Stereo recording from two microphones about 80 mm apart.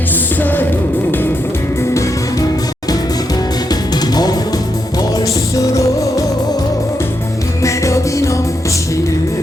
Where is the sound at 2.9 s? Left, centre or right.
Left.